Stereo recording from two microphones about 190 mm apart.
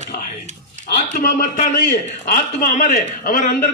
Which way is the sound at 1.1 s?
45° left (ahead or behind).